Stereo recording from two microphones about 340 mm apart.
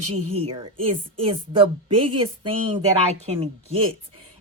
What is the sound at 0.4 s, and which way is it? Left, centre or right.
A woman's voice, centre.